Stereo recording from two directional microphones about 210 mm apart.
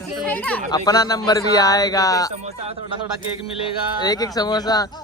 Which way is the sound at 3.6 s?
20° left (ahead or behind).